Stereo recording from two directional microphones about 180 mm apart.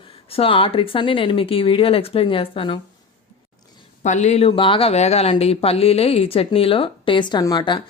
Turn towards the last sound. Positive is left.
turn(degrees=25)  # may be behind; listen again after turning